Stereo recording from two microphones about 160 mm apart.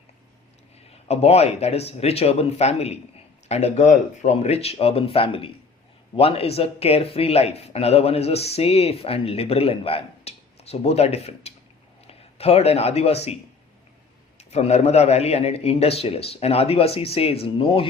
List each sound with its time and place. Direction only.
1.0 s a man's voice: 40° left (ahead or behind)
14.3 s speech: 45° left (ahead or behind)